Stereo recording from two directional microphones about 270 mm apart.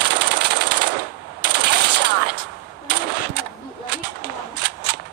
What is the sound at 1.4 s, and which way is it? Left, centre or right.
Machine gun, right.